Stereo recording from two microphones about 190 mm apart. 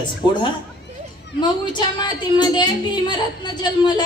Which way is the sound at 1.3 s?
25° left (ahead or behind).